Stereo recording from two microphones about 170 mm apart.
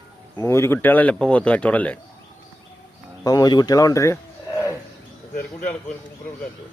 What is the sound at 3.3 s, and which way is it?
Speech, 25° left (ahead or behind).